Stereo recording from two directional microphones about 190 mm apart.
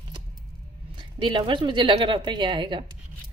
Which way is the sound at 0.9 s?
25° right (ahead or behind).